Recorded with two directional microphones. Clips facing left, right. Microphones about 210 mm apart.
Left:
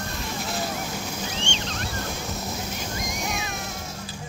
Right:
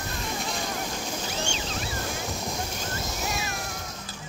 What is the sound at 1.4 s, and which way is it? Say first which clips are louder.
Boat: even; 5° right (ahead or behind).